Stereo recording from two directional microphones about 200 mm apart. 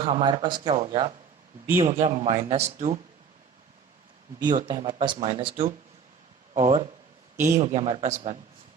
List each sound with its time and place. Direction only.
0.0 s a man's voice: 25° right (ahead or behind)
4.4 s a man's voice: 20° right (ahead or behind)